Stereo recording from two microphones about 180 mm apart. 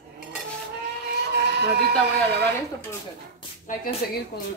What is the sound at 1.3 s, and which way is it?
Sheep, 65° right (ahead or behind).